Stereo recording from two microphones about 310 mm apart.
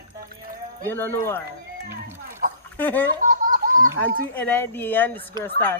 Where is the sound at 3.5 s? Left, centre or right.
Right.